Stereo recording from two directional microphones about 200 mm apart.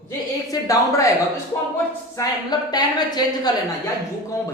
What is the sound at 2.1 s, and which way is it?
A woman's voice, 20° left (ahead or behind).